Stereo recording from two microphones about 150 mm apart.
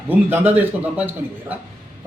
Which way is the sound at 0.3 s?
10° right (ahead or behind).